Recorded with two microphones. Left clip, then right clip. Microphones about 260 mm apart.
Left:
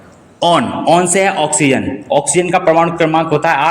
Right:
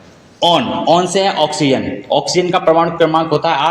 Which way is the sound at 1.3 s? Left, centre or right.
Left.